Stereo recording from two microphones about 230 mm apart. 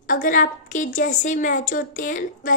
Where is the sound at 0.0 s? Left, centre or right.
Left.